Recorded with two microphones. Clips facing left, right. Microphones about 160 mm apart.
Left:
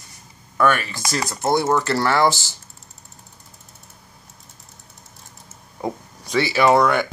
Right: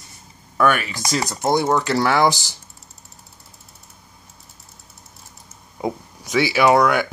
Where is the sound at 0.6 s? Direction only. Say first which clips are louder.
Even; 15° right (ahead or behind).